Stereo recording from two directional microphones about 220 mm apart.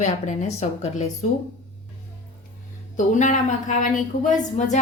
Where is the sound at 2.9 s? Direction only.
35° left (ahead or behind).